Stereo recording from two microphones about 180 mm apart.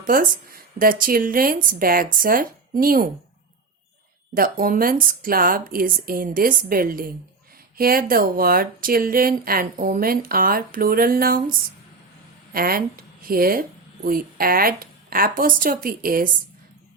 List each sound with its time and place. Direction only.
0.0 s speech: 50° right (ahead or behind)
4.4 s speech: 55° right (ahead or behind)
12.5 s speech: 55° right (ahead or behind)